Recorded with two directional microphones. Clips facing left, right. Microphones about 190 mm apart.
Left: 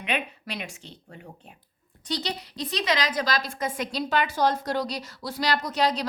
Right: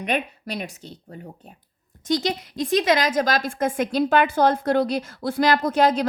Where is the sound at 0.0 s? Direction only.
40° right (ahead or behind).